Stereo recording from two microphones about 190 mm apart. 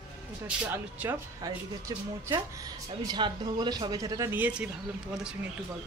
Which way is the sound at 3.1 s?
25° right (ahead or behind).